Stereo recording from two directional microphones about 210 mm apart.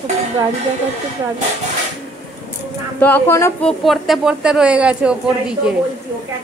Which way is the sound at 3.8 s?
Centre (ahead or behind).